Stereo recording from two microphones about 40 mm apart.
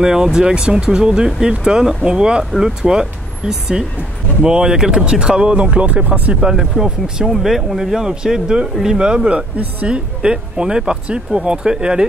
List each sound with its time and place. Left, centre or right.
0.0 s speech: centre; by 6.3 s right
6.4 s speech: centre